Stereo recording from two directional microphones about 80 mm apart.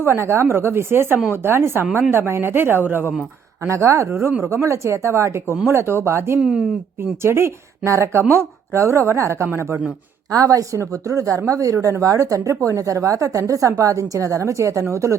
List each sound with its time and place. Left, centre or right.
0.0 s a woman's voice: right
3.7 s speech: right
6.4 s speech: centre
7.2 s speech: right
10.3 s a woman's voice: right